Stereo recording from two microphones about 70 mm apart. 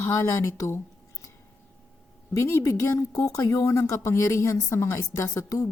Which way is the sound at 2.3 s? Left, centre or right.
Left.